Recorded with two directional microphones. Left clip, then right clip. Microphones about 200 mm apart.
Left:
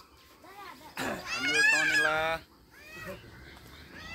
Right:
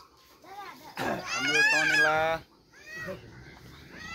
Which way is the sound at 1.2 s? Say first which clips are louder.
Right 1 dB; 20° right (ahead or behind).